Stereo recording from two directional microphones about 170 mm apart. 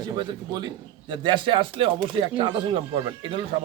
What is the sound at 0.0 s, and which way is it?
A man's voice, 25° right (ahead or behind).